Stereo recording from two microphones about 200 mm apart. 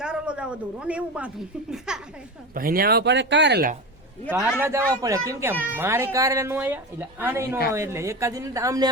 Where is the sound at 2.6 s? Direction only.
45° right (ahead or behind).